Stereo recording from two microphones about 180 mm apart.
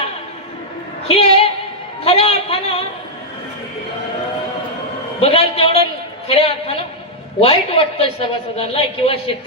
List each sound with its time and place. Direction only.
1.0 s a sound: 35° left (ahead or behind)
2.0 s speech: 35° left (ahead or behind)
5.2 s a man's voice: 35° left (ahead or behind)